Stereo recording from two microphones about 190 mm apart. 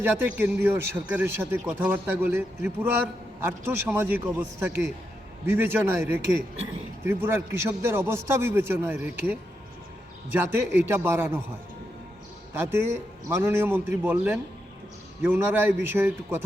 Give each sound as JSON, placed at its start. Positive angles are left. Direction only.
{"t": 0.0, "sound": "a man's voice", "side_deg": -10}
{"t": 3.9, "sound": "a man's voice", "side_deg": -10}
{"t": 12.5, "sound": "a man's voice", "side_deg": -15}